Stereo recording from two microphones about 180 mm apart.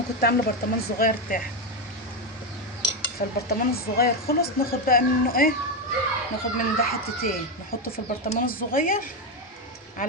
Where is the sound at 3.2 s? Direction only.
55° left (ahead or behind).